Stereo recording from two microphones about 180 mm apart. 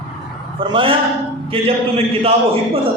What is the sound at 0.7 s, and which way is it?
Speech, 30° right (ahead or behind).